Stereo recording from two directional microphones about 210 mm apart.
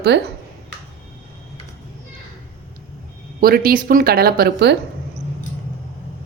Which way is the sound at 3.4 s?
45° right (ahead or behind).